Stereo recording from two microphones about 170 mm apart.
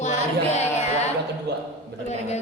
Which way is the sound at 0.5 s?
40° left (ahead or behind).